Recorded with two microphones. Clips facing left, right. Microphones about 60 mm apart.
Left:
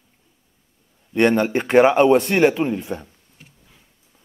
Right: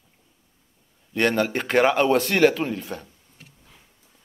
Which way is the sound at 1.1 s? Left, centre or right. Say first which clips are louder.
Left 5 dB; centre.